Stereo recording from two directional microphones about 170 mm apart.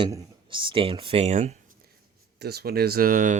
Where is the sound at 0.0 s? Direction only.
30° right (ahead or behind).